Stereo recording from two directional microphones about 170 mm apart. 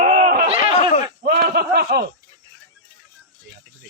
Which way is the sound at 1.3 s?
65° right (ahead or behind).